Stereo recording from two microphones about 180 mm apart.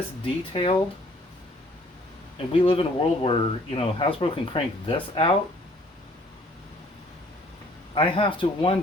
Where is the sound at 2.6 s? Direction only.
30° left (ahead or behind).